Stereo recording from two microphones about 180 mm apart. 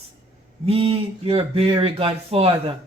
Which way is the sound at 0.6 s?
35° right (ahead or behind).